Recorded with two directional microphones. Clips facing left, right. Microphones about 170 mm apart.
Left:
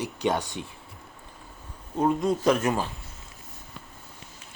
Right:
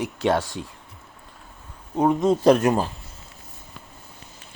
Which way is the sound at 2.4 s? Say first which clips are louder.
Right 6 dB; 35° right (ahead or behind).